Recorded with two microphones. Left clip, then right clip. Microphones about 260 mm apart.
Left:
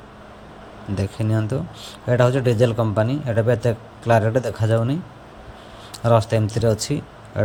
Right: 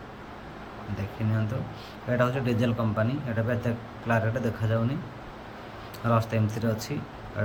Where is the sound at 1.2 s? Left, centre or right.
Left.